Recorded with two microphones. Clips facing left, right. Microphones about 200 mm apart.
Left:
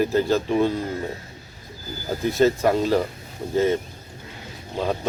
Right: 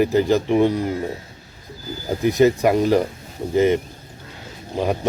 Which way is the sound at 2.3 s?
15° right (ahead or behind).